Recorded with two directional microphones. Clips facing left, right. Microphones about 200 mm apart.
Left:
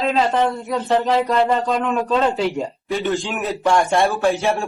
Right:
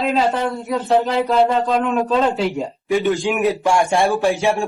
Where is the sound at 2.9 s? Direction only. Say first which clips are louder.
Right 5 dB; 15° right (ahead or behind).